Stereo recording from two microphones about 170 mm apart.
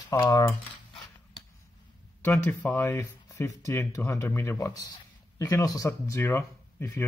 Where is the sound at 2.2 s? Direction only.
15° left (ahead or behind).